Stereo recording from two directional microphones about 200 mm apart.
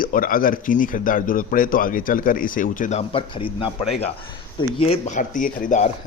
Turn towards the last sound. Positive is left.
turn(degrees=40)  # may be behind; listen again after turning